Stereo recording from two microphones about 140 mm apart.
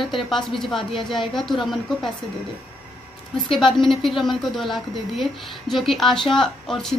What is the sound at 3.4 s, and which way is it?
A woman's voice, centre (ahead or behind).